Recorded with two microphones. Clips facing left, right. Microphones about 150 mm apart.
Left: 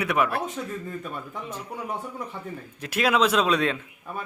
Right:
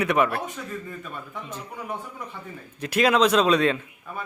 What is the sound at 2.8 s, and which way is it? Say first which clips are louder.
Speech: right 3 dB; 5° left (ahead or behind).